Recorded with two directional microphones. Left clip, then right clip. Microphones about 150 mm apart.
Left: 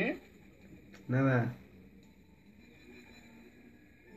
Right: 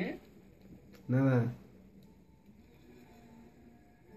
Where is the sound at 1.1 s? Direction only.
40° right (ahead or behind).